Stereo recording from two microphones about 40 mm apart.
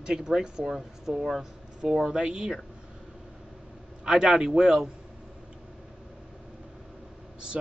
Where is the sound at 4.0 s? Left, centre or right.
Centre.